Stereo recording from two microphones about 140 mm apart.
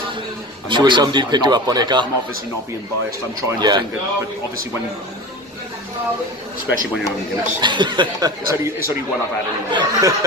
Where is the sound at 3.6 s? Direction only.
30° right (ahead or behind).